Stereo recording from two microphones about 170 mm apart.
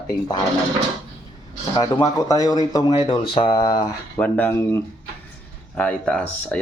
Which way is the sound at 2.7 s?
30° left (ahead or behind).